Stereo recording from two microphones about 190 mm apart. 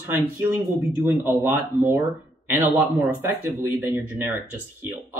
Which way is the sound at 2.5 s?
10° right (ahead or behind).